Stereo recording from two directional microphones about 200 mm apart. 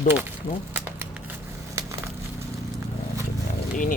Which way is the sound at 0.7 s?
10° right (ahead or behind).